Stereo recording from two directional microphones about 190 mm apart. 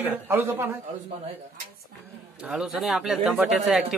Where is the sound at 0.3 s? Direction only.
10° right (ahead or behind).